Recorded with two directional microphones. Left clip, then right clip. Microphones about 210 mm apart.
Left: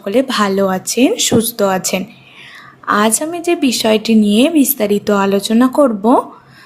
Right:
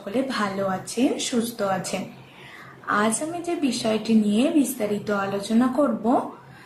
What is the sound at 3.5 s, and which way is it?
Speech, 50° left (ahead or behind).